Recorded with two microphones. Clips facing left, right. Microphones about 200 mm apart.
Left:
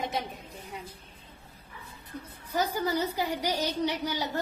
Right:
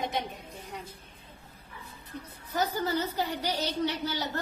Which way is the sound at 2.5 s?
10° left (ahead or behind).